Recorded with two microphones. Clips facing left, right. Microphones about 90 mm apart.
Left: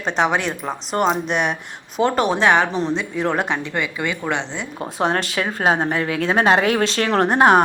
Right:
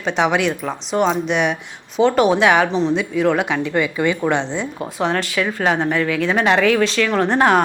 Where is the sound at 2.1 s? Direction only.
5° right (ahead or behind).